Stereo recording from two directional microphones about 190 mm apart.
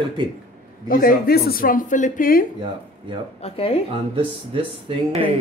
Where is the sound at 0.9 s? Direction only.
50° left (ahead or behind).